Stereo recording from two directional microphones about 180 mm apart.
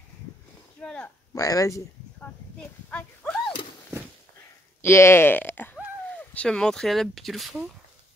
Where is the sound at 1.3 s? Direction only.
20° left (ahead or behind).